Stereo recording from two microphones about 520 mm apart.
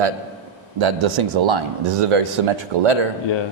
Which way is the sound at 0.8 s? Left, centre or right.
Right.